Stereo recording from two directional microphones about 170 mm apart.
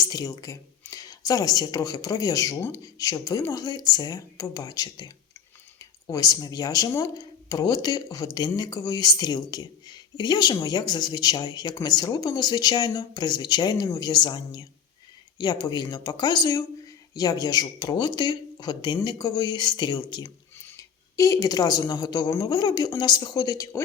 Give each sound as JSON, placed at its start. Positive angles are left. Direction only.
{"t": 0.0, "sound": "speech", "side_deg": 20}